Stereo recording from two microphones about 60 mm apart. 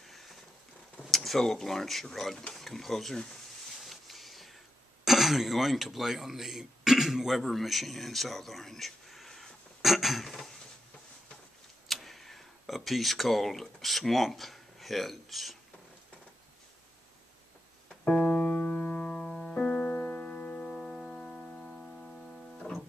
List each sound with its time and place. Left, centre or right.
0.0 s a sound: centre
1.0 s speech: centre
3.8 s a sound: centre
5.0 s speech: centre
9.8 s a sound: centre
11.9 s speech: centre
17.8 s keyboard: centre
18.7 s music: left
18.9 s keyboard: centre
19.7 s music: left
20.6 s music: centre
22.1 s keyboard: centre